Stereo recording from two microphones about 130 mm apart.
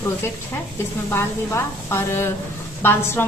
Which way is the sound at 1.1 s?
20° left (ahead or behind).